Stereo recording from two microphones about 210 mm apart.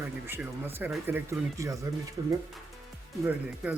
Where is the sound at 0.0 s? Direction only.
10° right (ahead or behind).